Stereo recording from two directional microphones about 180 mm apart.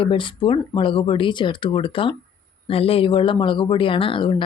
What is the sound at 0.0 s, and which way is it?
Speech, 30° left (ahead or behind).